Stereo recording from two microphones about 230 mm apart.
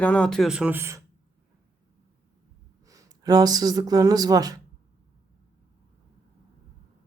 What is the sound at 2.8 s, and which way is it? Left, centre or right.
Speech, centre.